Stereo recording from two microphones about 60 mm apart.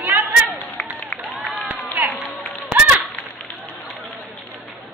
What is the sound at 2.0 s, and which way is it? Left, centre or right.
Run, right.